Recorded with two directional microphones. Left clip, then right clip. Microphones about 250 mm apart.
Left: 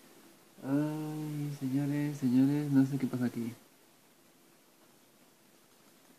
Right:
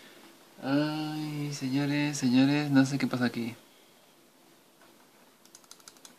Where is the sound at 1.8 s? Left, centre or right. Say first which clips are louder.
Right 5 dB; centre.